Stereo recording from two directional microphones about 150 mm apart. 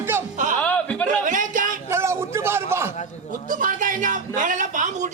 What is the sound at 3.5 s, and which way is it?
Speech, 65° right (ahead or behind).